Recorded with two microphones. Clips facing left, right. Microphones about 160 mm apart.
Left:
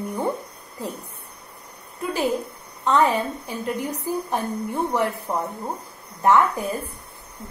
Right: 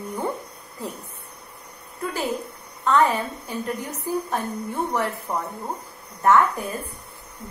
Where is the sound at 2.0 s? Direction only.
15° left (ahead or behind).